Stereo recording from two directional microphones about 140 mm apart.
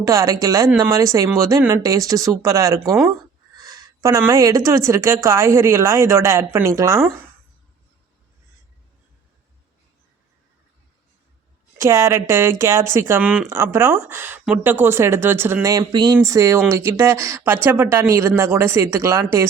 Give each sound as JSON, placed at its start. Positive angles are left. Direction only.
{"t": 0.0, "sound": "a woman's voice", "side_deg": -25}
{"t": 11.8, "sound": "speech", "side_deg": -20}
{"t": 15.8, "sound": "a sound", "side_deg": -30}
{"t": 16.2, "sound": "a woman's voice", "side_deg": -20}